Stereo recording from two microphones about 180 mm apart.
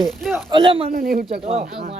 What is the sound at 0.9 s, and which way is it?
Speech, 55° right (ahead or behind).